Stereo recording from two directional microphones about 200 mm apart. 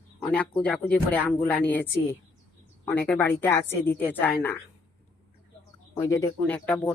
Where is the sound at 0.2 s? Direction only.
5° left (ahead or behind).